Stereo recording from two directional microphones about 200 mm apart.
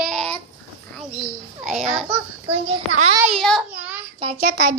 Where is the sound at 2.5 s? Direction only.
30° right (ahead or behind).